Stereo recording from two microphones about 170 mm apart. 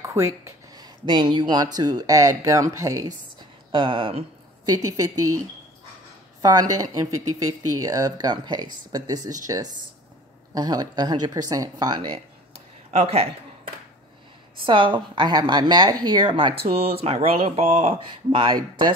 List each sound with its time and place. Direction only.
0.0 s speech: 15° right (ahead or behind)
6.4 s speech: 20° right (ahead or behind)
12.9 s speech: 35° right (ahead or behind)
14.7 s speech: 30° right (ahead or behind)
18.0 s speech: 25° right (ahead or behind)